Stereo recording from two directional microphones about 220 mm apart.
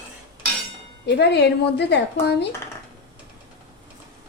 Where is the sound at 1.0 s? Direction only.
50° left (ahead or behind).